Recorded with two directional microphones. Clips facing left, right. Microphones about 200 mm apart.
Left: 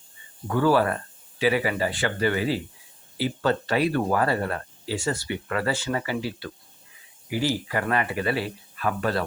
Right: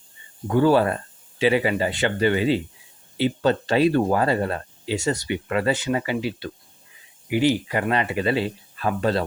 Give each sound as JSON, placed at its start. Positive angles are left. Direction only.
{"t": 0.4, "sound": "speech", "side_deg": -20}